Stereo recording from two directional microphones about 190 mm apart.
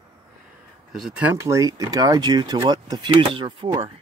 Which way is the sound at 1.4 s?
15° right (ahead or behind).